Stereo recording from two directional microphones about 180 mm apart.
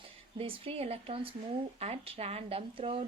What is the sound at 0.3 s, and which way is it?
Speech, 30° right (ahead or behind).